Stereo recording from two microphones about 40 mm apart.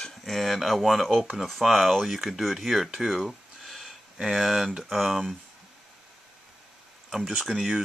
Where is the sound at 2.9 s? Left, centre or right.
Centre.